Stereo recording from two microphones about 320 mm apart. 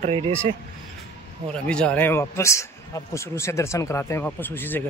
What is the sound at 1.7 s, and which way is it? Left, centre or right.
Speech, centre.